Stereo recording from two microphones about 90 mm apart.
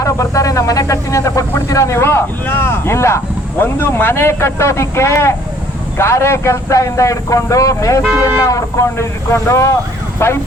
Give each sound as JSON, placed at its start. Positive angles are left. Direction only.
{"t": 0.0, "sound": "speech", "side_deg": 40}